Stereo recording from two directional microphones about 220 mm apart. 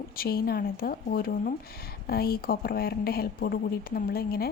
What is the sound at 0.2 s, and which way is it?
Speech, 45° left (ahead or behind).